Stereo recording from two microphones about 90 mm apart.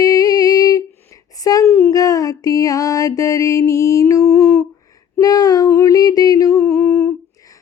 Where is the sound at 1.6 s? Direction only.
25° left (ahead or behind).